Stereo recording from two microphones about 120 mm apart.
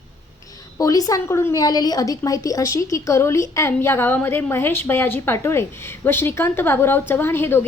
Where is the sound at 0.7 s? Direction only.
30° left (ahead or behind).